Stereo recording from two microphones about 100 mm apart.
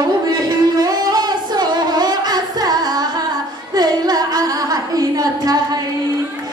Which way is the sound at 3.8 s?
40° right (ahead or behind).